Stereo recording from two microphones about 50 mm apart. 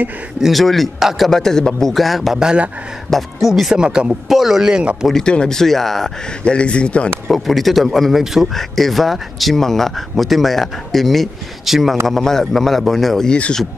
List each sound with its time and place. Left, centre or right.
0.4 s speech: centre
2.3 s speech: centre
3.1 s speech: centre
3.7 s speech: centre
4.1 s speech: centre
5.2 s a man's voice: centre
5.6 s speech: centre
6.4 s a man's voice: left
7.2 s speech: centre
8.5 s speech: centre
12.1 s speech: centre
13.3 s speech: centre